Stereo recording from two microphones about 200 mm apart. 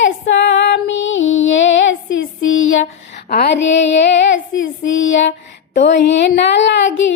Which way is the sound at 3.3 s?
55° left (ahead or behind).